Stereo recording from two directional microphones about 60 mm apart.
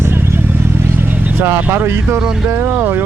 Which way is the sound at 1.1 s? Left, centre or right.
Right.